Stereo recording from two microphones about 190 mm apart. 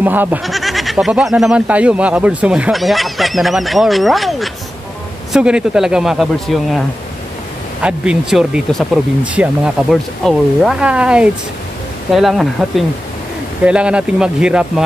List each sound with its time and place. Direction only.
0.0 s speech: 10° right (ahead or behind)
7.8 s speech: 5° right (ahead or behind)